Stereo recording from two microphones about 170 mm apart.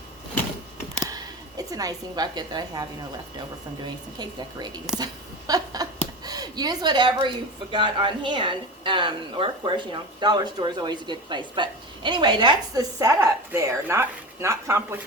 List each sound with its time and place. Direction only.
1.1 s a woman's voice: 20° right (ahead or behind)
3.8 s a woman's voice: 25° right (ahead or behind)
5.5 s a sound: 20° right (ahead or behind)
7.7 s a woman's voice: 30° right (ahead or behind)